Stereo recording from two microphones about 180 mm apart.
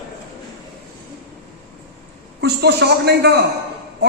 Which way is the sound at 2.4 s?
65° right (ahead or behind).